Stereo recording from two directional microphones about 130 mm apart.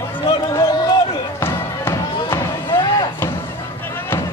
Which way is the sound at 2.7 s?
40° left (ahead or behind).